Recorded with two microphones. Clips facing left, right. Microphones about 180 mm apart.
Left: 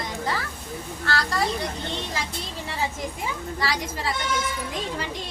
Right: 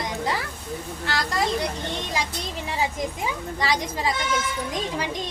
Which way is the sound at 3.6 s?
20° right (ahead or behind).